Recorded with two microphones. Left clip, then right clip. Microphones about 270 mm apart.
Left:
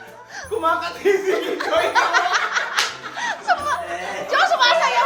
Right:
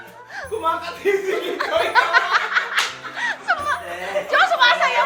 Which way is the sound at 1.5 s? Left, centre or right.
Centre.